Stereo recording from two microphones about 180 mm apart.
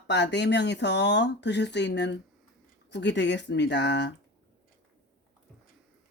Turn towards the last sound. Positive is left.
turn(degrees=75)  # may be behind; listen again after turning